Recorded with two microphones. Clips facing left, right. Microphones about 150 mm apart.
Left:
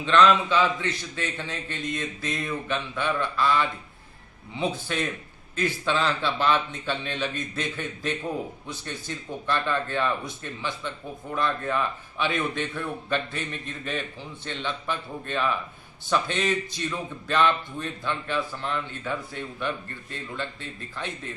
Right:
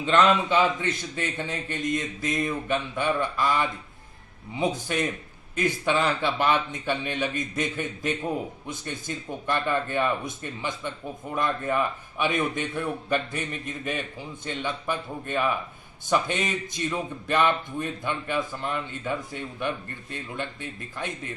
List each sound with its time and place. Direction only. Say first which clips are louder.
0.0 s speech: left 1 dB; 15° right (ahead or behind)